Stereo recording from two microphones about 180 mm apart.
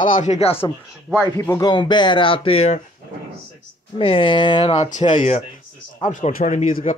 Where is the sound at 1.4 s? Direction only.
20° left (ahead or behind).